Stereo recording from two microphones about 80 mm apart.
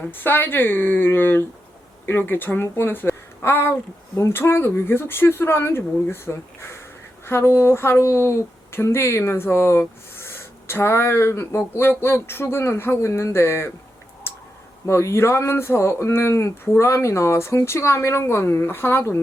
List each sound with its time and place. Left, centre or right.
0.1 s speech: left
14.8 s speech: left